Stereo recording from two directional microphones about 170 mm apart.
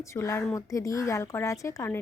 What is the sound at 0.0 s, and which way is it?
A woman's voice, 15° left (ahead or behind).